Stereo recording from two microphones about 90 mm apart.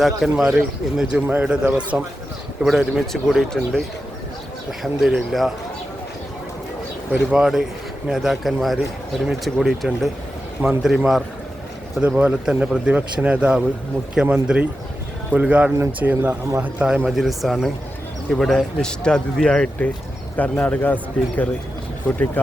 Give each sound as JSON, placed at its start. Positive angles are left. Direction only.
{"t": 0.0, "sound": "a man's voice", "side_deg": -5}
{"t": 2.6, "sound": "a man's voice", "side_deg": 0}
{"t": 7.1, "sound": "a man's voice", "side_deg": -10}
{"t": 10.6, "sound": "a man's voice", "side_deg": -10}
{"t": 17.2, "sound": "a man's voice", "side_deg": 0}